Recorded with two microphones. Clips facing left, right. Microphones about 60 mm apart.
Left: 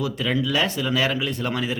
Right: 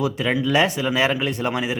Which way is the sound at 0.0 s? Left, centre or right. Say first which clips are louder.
Right 2 dB; right.